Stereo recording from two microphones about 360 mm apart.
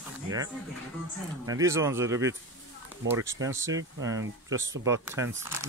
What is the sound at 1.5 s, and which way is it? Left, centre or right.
Speech, centre.